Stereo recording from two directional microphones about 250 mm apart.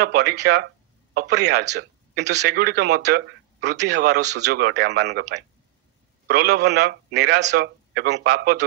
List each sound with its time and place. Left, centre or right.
0.0 s a man's voice: right